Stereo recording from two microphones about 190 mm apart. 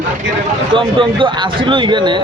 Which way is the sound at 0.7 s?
25° right (ahead or behind).